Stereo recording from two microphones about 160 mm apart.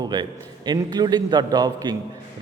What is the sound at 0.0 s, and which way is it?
A man's voice, 25° right (ahead or behind).